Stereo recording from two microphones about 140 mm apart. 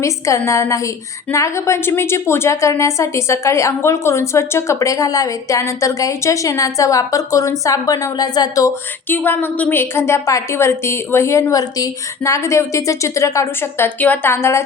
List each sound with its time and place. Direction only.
0.0 s a woman's voice: 20° left (ahead or behind)
9.0 s a woman's voice: 15° left (ahead or behind)